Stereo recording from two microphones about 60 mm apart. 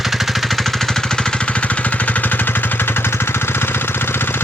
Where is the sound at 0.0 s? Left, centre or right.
Centre.